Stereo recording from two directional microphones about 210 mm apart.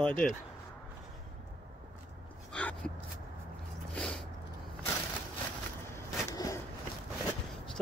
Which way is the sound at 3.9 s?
Centre (ahead or behind).